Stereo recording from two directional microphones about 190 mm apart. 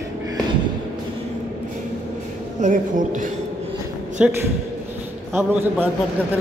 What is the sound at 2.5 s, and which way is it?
Speech, 40° right (ahead or behind).